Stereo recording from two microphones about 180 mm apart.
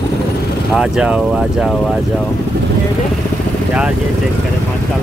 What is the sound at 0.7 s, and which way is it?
Speech, 5° right (ahead or behind).